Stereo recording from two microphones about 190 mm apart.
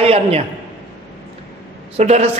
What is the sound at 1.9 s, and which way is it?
Speech, 35° right (ahead or behind).